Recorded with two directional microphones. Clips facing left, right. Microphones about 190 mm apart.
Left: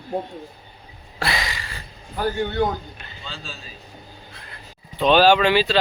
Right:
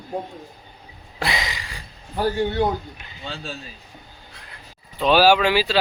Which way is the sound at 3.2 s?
60° right (ahead or behind).